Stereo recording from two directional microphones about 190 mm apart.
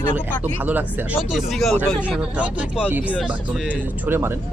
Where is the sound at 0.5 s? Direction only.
10° right (ahead or behind).